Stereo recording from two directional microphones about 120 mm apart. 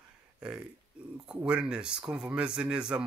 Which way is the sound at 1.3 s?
10° right (ahead or behind).